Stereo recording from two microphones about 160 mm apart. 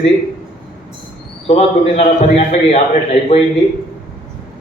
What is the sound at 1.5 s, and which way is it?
A man's voice, 40° left (ahead or behind).